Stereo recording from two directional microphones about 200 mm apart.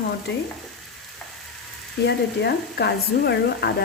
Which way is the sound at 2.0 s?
55° left (ahead or behind).